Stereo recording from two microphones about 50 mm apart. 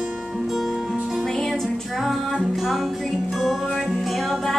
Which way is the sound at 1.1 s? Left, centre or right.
Centre.